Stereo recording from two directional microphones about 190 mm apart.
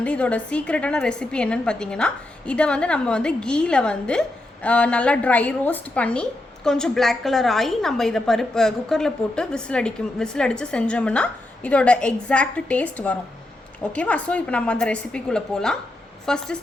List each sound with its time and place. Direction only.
0.0 s a woman's voice: 5° left (ahead or behind)